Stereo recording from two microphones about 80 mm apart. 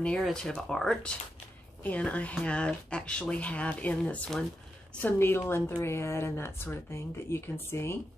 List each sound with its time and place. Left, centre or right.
0.3 s speech: centre
1.8 s speech: centre
5.0 s a woman's voice: left